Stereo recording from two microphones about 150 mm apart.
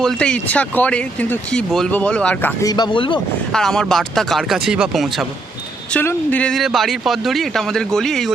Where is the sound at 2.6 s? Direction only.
30° left (ahead or behind).